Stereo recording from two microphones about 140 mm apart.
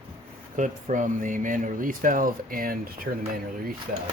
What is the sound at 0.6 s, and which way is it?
Speech, 65° right (ahead or behind).